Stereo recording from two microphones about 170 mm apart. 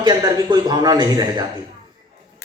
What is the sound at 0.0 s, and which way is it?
A man's voice, 25° right (ahead or behind).